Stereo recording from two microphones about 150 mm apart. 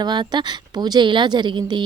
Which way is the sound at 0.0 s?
30° right (ahead or behind).